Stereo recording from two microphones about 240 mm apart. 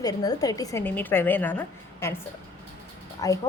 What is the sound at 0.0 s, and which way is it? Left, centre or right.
A woman's voice, centre.